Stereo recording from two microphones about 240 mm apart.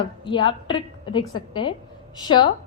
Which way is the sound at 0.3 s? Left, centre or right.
Left.